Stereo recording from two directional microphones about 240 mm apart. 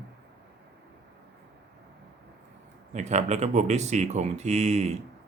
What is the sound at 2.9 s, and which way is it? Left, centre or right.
Speech, right.